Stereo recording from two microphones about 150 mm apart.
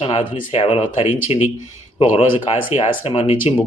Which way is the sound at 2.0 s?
35° left (ahead or behind).